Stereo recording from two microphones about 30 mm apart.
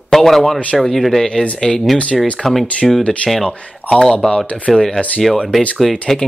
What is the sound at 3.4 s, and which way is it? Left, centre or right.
Speech, left.